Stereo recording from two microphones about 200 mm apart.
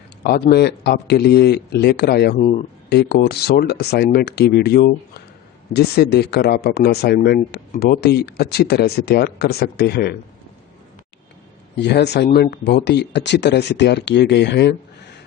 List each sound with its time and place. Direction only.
0.2 s speech: 50° left (ahead or behind)
2.4 s speech: 35° left (ahead or behind)
2.9 s speech: 55° left (ahead or behind)
11.8 s speech: 55° left (ahead or behind)